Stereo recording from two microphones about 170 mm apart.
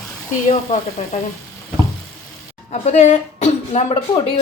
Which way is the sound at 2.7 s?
40° left (ahead or behind).